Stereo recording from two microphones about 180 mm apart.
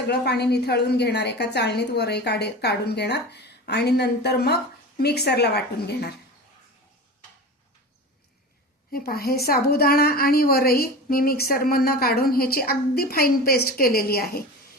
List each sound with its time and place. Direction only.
0.1 s a woman's voice: 65° left (ahead or behind)
8.9 s a woman's voice: 60° left (ahead or behind)